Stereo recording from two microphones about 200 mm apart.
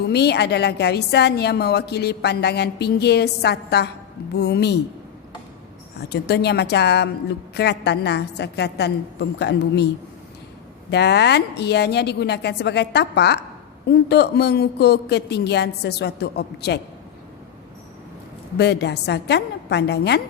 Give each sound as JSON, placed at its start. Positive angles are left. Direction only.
{"t": 0.1, "sound": "a woman's voice", "side_deg": 55}
{"t": 6.0, "sound": "a woman's voice", "side_deg": 55}
{"t": 10.9, "sound": "a woman's voice", "side_deg": 55}
{"t": 18.5, "sound": "a woman's voice", "side_deg": 55}